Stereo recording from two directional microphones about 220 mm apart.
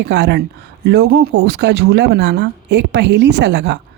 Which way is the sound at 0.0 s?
50° right (ahead or behind).